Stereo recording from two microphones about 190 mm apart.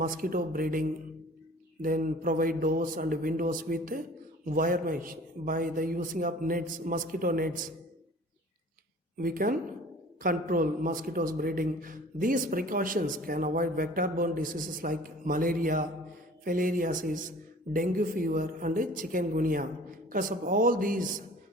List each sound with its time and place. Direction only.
0.0 s a man's voice: 45° right (ahead or behind)
9.1 s a man's voice: 50° right (ahead or behind)